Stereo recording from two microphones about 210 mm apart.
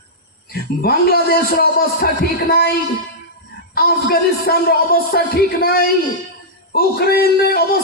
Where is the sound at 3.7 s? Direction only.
45° left (ahead or behind).